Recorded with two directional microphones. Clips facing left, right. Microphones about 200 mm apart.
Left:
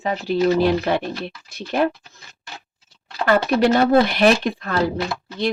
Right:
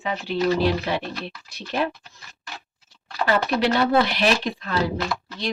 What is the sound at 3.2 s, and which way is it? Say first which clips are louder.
Speech: left 4 dB; 50° left (ahead or behind).